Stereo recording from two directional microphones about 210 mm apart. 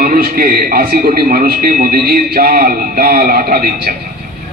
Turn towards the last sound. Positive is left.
turn(degrees=-45)  # may be behind; listen again after turning